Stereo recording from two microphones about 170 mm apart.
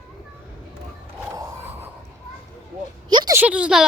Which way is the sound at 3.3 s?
5° right (ahead or behind).